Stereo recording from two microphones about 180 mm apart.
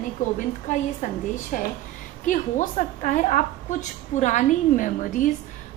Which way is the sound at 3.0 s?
45° left (ahead or behind).